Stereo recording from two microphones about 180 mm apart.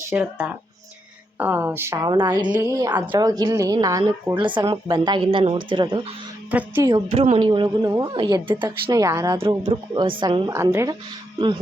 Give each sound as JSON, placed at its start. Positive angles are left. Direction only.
{"t": 0.1, "sound": "a woman's voice", "side_deg": -10}
{"t": 6.5, "sound": "a woman's voice", "side_deg": -10}
{"t": 6.9, "sound": "speech", "side_deg": -35}